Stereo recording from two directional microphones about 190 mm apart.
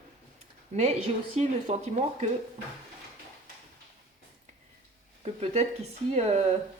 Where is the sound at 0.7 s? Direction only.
35° right (ahead or behind).